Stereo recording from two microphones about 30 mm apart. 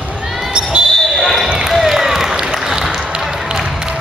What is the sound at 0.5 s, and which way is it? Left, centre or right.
Basketball bounce, right.